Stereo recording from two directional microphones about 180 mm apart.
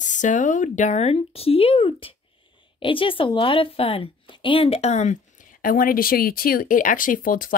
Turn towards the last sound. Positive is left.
turn(degrees=50)  # may be behind; listen again after turning